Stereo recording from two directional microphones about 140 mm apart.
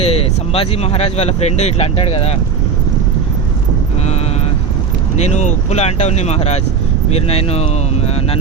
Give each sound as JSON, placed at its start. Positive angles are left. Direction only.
{"t": 0.0, "sound": "speech", "side_deg": 45}
{"t": 5.1, "sound": "speech", "side_deg": 55}